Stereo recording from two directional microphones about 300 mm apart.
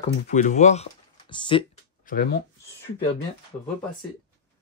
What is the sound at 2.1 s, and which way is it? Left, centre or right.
Speech, left.